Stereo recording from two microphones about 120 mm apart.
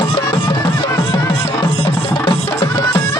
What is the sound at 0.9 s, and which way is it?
Music, 25° left (ahead or behind).